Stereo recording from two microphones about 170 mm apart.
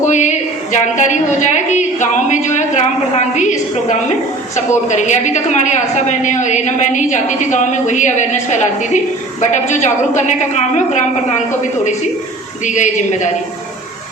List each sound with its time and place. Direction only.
0.1 s a woman's voice: 45° left (ahead or behind)
12.6 s a woman's voice: 45° left (ahead or behind)